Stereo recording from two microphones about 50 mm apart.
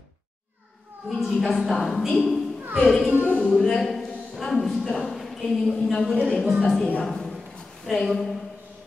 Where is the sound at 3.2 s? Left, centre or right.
Left.